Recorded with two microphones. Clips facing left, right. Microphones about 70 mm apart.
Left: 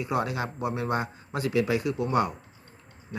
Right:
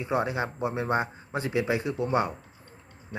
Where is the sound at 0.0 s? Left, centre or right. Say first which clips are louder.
Right 1 dB; right.